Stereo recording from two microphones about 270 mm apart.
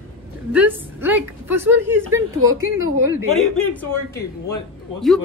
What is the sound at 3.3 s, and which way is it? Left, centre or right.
A man's voice, centre.